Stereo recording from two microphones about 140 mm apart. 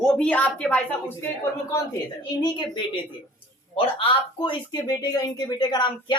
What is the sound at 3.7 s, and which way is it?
Speech, 40° left (ahead or behind).